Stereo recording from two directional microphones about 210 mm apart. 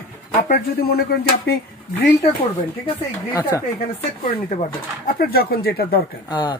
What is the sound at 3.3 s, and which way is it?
Speech, 15° left (ahead or behind).